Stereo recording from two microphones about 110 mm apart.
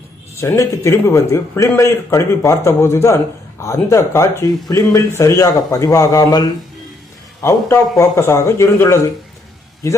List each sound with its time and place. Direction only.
0.3 s speech: 25° left (ahead or behind)
7.4 s speech: 25° left (ahead or behind)